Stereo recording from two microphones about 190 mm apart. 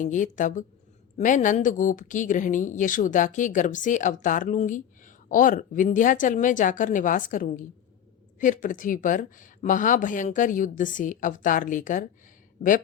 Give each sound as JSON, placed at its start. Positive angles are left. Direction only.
{"t": 0.0, "sound": "a woman's voice", "side_deg": 40}